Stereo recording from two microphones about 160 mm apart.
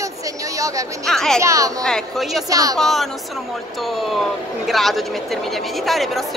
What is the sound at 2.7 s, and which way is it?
Speech, centre (ahead or behind).